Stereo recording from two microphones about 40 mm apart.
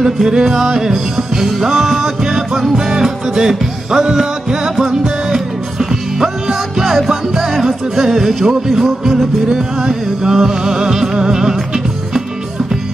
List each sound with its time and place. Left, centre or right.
0.0 s music: centre